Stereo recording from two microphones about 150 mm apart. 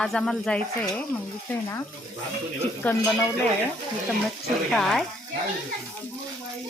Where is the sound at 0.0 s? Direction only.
5° left (ahead or behind).